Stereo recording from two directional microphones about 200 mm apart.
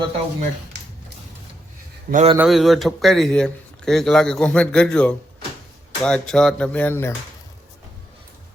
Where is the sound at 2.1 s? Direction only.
50° right (ahead or behind).